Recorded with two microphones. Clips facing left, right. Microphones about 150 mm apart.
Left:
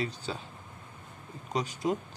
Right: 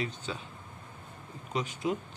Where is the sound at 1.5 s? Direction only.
40° left (ahead or behind).